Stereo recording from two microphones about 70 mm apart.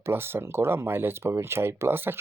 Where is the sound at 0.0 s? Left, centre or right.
Right.